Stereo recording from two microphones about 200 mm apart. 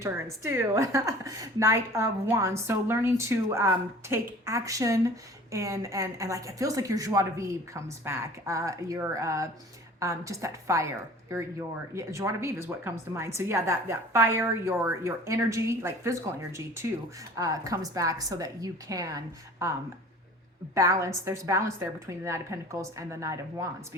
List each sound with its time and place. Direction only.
0.0 s a woman's voice: 15° right (ahead or behind)
20.7 s a woman's voice: 15° right (ahead or behind)